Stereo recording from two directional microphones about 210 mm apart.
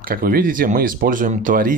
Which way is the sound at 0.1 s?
45° right (ahead or behind).